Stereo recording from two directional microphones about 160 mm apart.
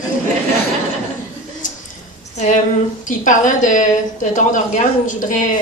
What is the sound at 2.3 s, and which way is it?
A woman's voice, 50° left (ahead or behind).